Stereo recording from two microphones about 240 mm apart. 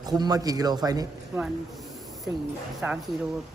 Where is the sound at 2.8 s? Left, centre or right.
Centre.